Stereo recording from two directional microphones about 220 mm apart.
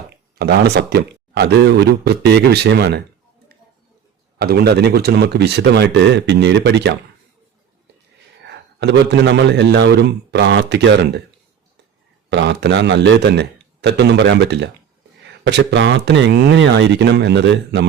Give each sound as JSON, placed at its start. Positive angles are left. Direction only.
{"t": 0.3, "sound": "a man's voice", "side_deg": -45}
{"t": 4.4, "sound": "a man's voice", "side_deg": -45}
{"t": 8.4, "sound": "a man's voice", "side_deg": -50}
{"t": 12.3, "sound": "a man's voice", "side_deg": -50}